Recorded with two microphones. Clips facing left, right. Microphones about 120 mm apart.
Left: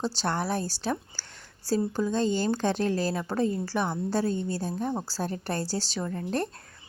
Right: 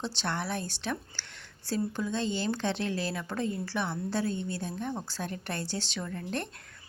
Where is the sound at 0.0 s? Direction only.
40° left (ahead or behind).